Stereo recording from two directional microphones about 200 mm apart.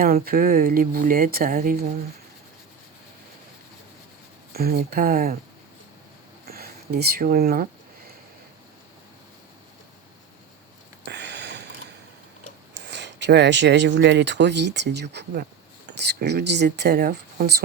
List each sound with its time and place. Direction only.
0.0 s speech: 45° right (ahead or behind)
4.5 s speech: 50° right (ahead or behind)
6.5 s speech: 50° right (ahead or behind)
11.0 s a sound: 60° right (ahead or behind)
12.8 s speech: 60° right (ahead or behind)